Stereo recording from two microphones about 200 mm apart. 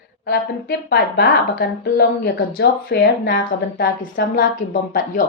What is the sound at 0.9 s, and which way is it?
Speech, 55° left (ahead or behind).